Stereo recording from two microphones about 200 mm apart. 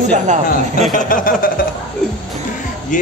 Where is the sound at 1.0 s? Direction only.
45° left (ahead or behind).